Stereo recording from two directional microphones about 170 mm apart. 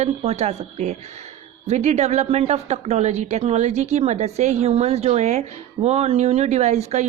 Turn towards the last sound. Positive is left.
turn(degrees=-40)  # may be behind; listen again after turning